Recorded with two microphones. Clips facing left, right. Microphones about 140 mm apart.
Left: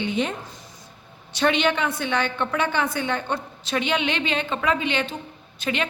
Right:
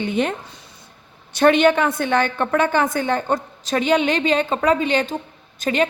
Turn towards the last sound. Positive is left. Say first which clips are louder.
# right 6 dB
turn(degrees=-40)  # may be behind; listen again after turning